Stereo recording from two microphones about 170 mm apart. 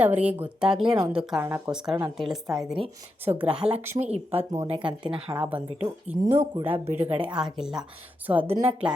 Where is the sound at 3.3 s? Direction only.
25° right (ahead or behind).